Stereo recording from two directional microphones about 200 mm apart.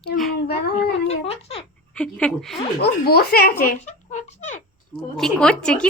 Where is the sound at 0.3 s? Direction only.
55° left (ahead or behind).